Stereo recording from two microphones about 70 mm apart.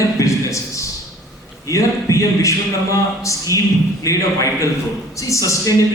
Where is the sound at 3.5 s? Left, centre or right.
Left.